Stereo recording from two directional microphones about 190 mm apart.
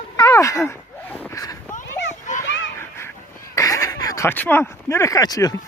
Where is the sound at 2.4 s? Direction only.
70° left (ahead or behind).